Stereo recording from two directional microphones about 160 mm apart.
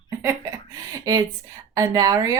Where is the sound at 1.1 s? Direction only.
25° right (ahead or behind).